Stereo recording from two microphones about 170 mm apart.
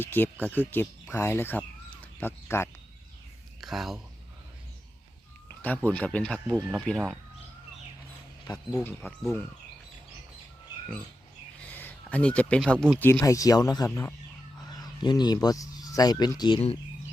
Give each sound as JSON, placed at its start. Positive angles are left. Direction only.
{"t": 0.0, "sound": "speech", "side_deg": 10}
{"t": 3.6, "sound": "speech", "side_deg": 0}
{"t": 5.5, "sound": "speech", "side_deg": 10}
{"t": 8.4, "sound": "speech", "side_deg": 15}
{"t": 11.7, "sound": "speech", "side_deg": 10}